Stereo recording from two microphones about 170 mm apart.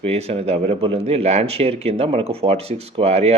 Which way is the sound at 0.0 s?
40° right (ahead or behind).